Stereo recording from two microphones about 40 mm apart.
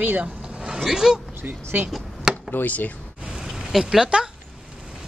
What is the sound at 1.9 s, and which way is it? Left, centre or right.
Chop, centre.